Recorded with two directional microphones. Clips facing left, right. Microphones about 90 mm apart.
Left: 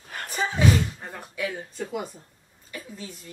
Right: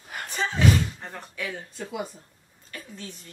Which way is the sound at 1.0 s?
10° left (ahead or behind).